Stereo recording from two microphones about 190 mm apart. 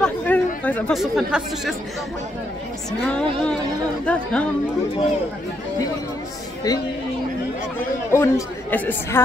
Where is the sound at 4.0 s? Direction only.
5° left (ahead or behind).